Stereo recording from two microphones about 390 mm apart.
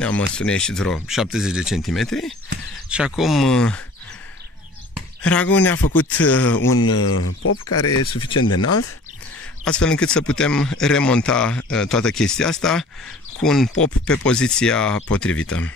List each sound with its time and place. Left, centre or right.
0.0 s speech: centre
5.2 s speech: centre
6.6 s speech: left
8.1 s speech: centre
8.5 s speech: left
9.7 s speech: centre